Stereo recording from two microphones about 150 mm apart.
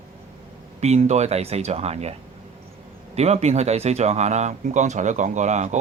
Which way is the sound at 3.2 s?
45° right (ahead or behind).